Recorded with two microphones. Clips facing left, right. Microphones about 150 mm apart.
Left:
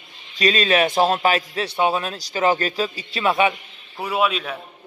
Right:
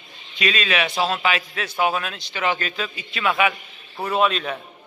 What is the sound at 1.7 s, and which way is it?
A man's voice, 25° left (ahead or behind).